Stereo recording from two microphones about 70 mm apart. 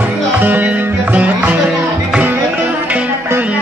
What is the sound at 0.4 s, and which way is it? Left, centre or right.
Music, right.